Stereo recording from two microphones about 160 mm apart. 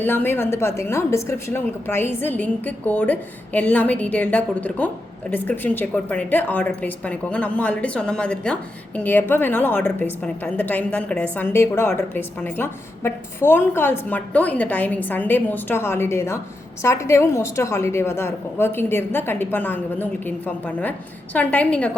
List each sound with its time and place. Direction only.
0.0 s a woman's voice: 15° left (ahead or behind)